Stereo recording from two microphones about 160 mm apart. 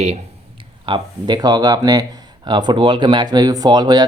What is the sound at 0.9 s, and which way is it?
Speech, 30° right (ahead or behind).